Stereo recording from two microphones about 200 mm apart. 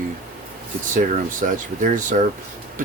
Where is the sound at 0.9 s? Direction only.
40° right (ahead or behind).